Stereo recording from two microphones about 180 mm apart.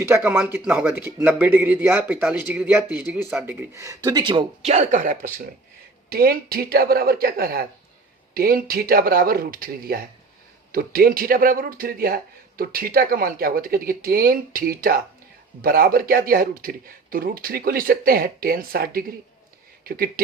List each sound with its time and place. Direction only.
0.1 s a man's voice: 15° right (ahead or behind); by 20.2 s 55° right (ahead or behind)